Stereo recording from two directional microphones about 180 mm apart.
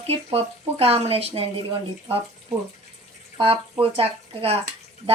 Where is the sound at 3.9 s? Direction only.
35° right (ahead or behind).